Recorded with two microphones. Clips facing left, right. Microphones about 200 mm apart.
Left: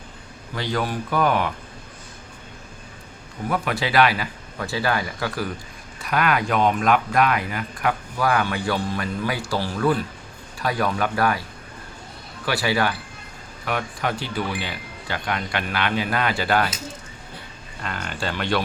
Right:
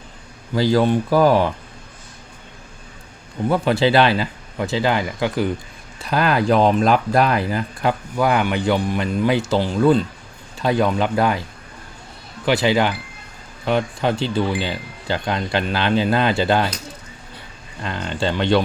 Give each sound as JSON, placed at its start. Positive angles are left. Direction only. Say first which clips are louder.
{"t": 0.5, "sound": "speech", "louder": "right 9 dB", "side_deg": -30}
{"t": 3.5, "sound": "speech", "louder": "right 6 dB", "side_deg": -30}
{"t": 6.0, "sound": "speech", "louder": "right 3 dB", "side_deg": -30}
{"t": 12.5, "sound": "speech", "louder": "right 5 dB", "side_deg": -20}
{"t": 17.8, "sound": "speech", "louder": "right 6 dB", "side_deg": -20}